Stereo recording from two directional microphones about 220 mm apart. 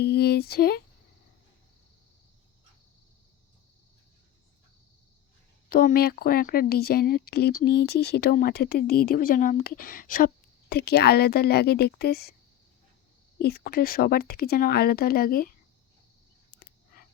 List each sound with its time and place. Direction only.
0.0 s speech: 45° left (ahead or behind)
5.6 s speech: 40° left (ahead or behind)
13.4 s speech: 45° left (ahead or behind)
16.6 s a sound: 40° left (ahead or behind)